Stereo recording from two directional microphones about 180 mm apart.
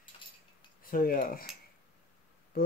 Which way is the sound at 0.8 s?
50° left (ahead or behind).